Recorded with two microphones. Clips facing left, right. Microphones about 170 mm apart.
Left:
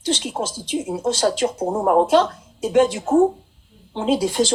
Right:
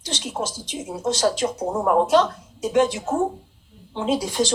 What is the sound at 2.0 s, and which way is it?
Speech, 30° left (ahead or behind).